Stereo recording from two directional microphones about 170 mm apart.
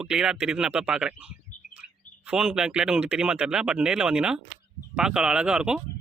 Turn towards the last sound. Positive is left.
turn(degrees=-5)  # may be behind; listen again after turning